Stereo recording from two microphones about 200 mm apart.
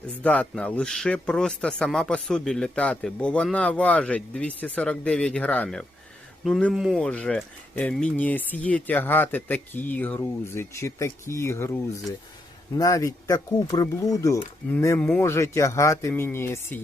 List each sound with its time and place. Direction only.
0.0 s speech: 5° left (ahead or behind)
12.7 s speech: 15° left (ahead or behind)